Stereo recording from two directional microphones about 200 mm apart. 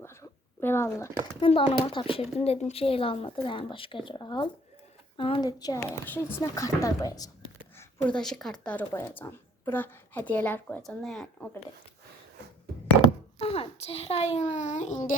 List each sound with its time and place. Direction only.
0.0 s a sound: 10° left (ahead or behind)
1.4 s speech: 25° left (ahead or behind)
7.8 s speech: 5° left (ahead or behind)
13.4 s a child's voice: 30° left (ahead or behind)